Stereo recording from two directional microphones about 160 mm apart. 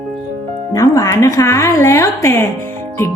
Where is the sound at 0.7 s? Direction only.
20° left (ahead or behind).